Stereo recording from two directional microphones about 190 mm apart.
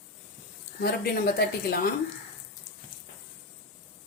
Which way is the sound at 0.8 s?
55° left (ahead or behind).